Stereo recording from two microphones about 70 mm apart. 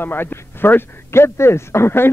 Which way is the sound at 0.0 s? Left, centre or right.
Left.